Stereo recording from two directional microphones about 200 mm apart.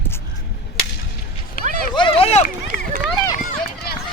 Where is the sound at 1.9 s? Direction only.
25° left (ahead or behind).